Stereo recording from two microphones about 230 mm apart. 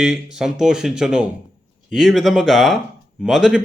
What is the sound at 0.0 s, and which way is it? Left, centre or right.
Speech, centre.